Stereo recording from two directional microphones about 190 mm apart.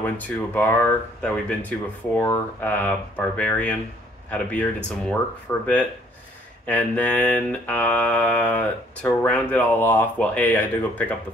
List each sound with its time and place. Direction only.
0.6 s mantra: 10° left (ahead or behind)